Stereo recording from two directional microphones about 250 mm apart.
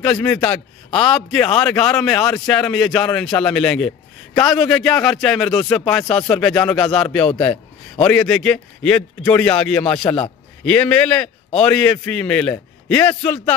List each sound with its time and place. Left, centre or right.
0.0 s a man's voice: centre
10.0 s a man's voice: left
10.6 s a man's voice: centre